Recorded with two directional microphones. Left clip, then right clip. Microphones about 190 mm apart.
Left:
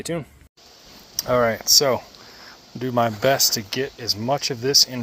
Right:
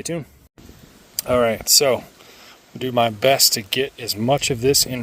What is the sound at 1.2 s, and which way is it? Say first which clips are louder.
Speech: right 1 dB; 30° right (ahead or behind).